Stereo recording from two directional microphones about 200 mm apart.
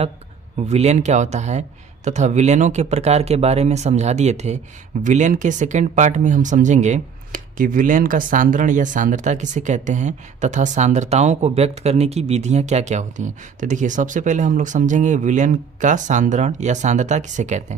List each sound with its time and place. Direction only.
0.7 s speech: 35° right (ahead or behind)